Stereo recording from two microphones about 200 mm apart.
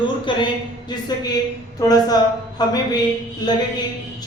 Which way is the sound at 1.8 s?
20° left (ahead or behind).